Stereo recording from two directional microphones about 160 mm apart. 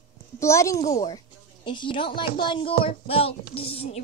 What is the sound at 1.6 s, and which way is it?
A woman's voice, 30° left (ahead or behind).